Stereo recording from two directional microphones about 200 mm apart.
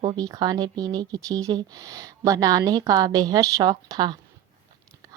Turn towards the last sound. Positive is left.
turn(degrees=-20)  # may be behind; listen again after turning